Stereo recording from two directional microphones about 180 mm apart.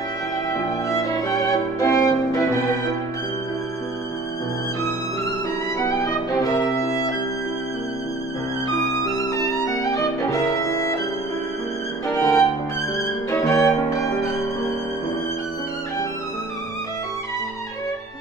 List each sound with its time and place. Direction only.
0.5 s music: 20° left (ahead or behind)
5.8 s music: 15° left (ahead or behind)
8.6 s music: 20° left (ahead or behind)
12.1 s music: 15° left (ahead or behind)